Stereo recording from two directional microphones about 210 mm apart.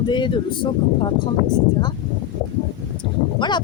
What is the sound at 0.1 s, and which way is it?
Speech, 20° left (ahead or behind).